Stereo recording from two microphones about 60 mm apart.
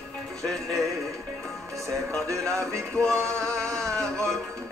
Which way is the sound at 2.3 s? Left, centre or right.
Right.